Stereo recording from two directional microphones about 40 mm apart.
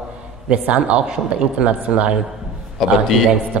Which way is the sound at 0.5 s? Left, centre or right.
Right.